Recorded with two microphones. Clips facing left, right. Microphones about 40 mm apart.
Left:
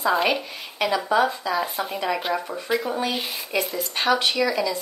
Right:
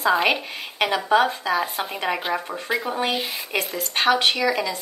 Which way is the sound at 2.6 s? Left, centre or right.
Right.